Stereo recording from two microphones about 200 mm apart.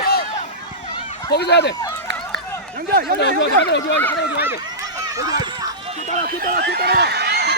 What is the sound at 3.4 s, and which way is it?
Speech, 60° left (ahead or behind).